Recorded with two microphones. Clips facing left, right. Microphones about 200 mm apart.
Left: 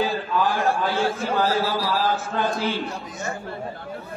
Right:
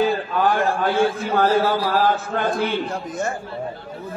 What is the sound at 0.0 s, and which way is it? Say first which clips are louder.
A man's voice: right 3 dB; 55° right (ahead or behind).